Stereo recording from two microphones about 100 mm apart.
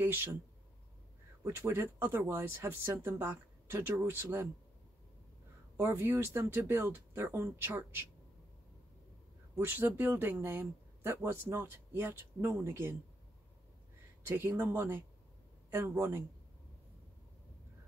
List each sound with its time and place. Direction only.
0.0 s speech: 25° right (ahead or behind)
1.4 s speech: 25° right (ahead or behind)
5.8 s speech: 25° right (ahead or behind)
9.6 s speech: 20° right (ahead or behind)
14.2 s speech: 25° right (ahead or behind)